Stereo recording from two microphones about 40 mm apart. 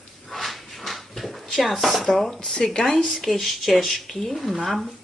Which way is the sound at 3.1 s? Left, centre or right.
Centre.